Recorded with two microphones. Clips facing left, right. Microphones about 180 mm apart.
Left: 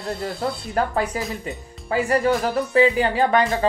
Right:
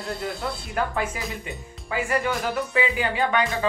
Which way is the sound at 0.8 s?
40° left (ahead or behind).